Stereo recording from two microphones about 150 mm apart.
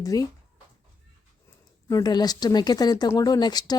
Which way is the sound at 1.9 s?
25° left (ahead or behind).